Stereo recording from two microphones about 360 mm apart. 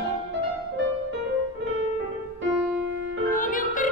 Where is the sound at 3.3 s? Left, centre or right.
Left.